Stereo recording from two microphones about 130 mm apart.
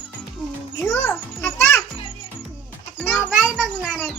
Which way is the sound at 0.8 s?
15° left (ahead or behind).